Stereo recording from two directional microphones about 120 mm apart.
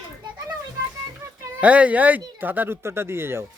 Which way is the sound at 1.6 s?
10° right (ahead or behind).